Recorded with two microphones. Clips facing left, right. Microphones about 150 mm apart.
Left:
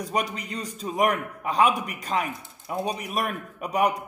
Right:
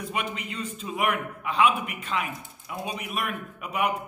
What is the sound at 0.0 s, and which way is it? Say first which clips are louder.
A man's voice: left 3 dB; 40° left (ahead or behind).